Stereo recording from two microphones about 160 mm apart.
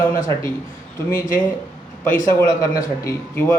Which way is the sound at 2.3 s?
20° left (ahead or behind).